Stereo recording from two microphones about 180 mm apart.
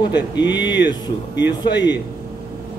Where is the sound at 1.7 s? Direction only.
75° left (ahead or behind).